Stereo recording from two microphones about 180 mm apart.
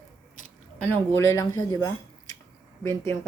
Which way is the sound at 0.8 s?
10° left (ahead or behind).